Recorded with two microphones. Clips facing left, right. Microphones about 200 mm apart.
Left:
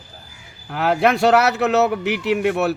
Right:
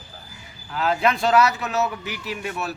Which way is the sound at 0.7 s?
65° left (ahead or behind).